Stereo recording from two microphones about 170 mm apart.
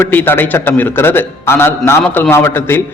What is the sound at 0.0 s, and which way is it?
A man's voice, 10° left (ahead or behind).